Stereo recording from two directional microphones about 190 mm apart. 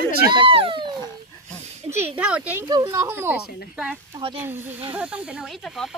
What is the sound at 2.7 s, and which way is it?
Speech, 20° right (ahead or behind).